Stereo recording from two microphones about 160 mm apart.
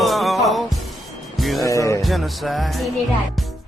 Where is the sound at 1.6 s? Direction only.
20° left (ahead or behind).